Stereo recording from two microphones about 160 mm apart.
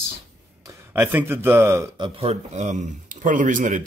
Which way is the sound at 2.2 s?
45° right (ahead or behind).